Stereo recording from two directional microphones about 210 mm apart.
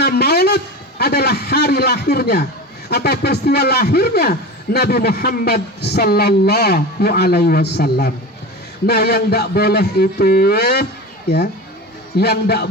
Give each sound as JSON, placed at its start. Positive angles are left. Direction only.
{"t": 0.0, "sound": "a sound", "side_deg": 50}
{"t": 2.9, "sound": "a man's voice", "side_deg": 50}
{"t": 12.1, "sound": "a man's voice", "side_deg": 50}